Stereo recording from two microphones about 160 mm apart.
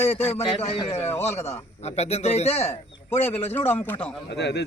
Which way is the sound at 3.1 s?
15° left (ahead or behind).